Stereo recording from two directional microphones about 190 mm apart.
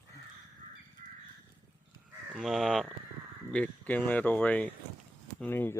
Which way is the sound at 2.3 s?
Centre (ahead or behind).